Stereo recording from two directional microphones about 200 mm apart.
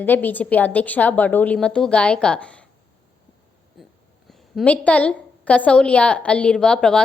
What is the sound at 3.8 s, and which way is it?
Wheeze, centre (ahead or behind).